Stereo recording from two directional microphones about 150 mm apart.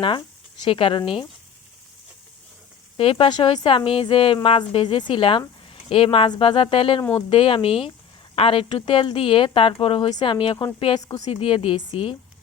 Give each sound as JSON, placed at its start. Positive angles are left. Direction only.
{"t": 0.6, "sound": "a woman's voice", "side_deg": 35}
{"t": 3.0, "sound": "a woman's voice", "side_deg": 40}
{"t": 7.0, "sound": "speech", "side_deg": 10}
{"t": 7.3, "sound": "a woman's voice", "side_deg": 40}